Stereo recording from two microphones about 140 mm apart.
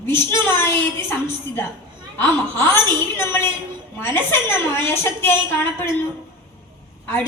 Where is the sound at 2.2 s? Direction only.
15° left (ahead or behind).